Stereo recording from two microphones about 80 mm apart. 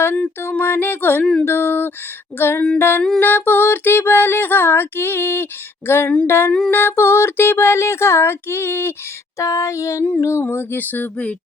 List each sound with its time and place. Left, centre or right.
0.4 s female singing: left
1.2 s speech: centre
1.5 s female singing: left
6.7 s a sound: left
9.4 s a sound: left
10.2 s female singing: left; by 11.3 s centre